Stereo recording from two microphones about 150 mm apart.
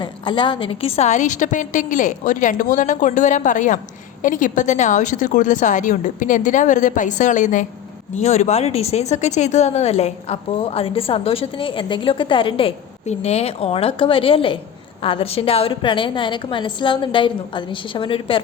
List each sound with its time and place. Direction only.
0.0 s a woman's voice: 30° left (ahead or behind)